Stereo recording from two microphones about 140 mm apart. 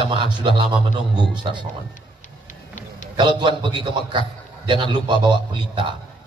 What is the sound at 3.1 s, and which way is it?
A man's voice, 35° right (ahead or behind).